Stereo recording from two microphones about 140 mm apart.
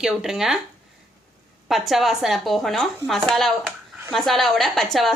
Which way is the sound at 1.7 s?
Centre (ahead or behind).